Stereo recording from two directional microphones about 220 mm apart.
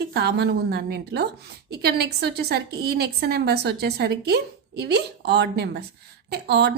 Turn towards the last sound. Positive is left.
turn(degrees=-50)  # may be behind; listen again after turning